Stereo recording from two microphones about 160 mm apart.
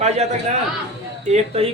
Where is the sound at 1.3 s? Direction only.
40° right (ahead or behind).